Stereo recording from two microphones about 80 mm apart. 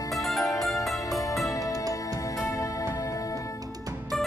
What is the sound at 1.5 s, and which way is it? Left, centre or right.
Music, left.